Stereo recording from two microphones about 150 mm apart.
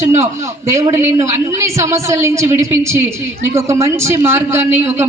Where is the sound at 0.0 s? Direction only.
20° right (ahead or behind).